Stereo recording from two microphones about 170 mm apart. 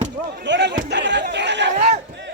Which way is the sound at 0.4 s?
90° right.